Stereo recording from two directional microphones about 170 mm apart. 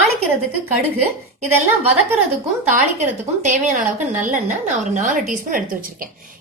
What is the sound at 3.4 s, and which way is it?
A woman's voice, 45° right (ahead or behind).